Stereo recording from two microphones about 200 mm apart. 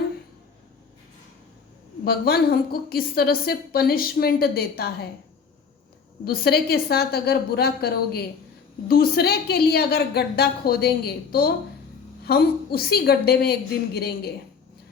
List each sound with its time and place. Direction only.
2.0 s a woman's voice: 50° left (ahead or behind)
6.2 s a woman's voice: 50° left (ahead or behind)